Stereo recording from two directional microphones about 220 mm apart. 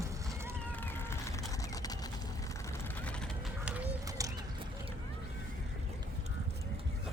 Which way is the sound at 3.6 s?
5° right (ahead or behind).